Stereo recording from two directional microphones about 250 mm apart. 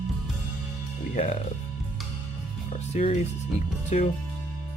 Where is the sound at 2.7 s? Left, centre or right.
Left.